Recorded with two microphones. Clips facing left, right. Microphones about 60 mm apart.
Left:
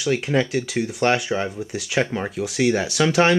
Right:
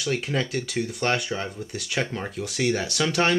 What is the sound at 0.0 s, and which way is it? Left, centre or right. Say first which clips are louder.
Speech: left 6 dB; centre.